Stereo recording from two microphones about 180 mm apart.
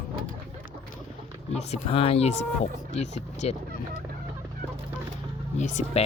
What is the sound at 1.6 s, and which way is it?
Speech, 35° left (ahead or behind).